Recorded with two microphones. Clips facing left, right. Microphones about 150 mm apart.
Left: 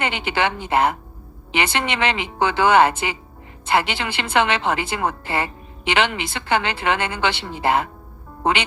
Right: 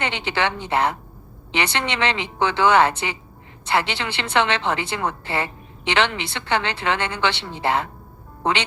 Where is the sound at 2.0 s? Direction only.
10° left (ahead or behind).